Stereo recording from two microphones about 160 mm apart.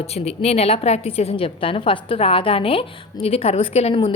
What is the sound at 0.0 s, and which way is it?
A woman's voice, 40° left (ahead or behind).